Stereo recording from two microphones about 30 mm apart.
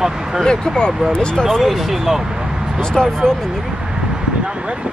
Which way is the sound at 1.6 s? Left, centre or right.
Centre.